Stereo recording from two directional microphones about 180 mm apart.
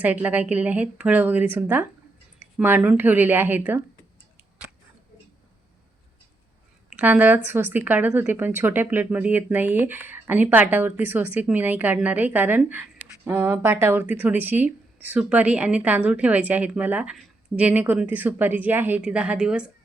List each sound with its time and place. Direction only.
0.0 s speech: 10° right (ahead or behind)
6.9 s speech: 10° right (ahead or behind)